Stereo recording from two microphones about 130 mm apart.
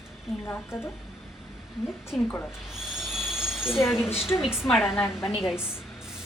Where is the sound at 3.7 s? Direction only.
20° left (ahead or behind).